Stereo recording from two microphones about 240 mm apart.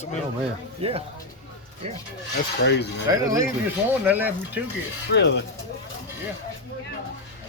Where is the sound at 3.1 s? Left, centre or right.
Centre.